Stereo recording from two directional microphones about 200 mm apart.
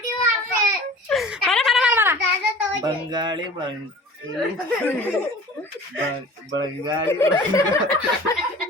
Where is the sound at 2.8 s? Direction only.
20° right (ahead or behind).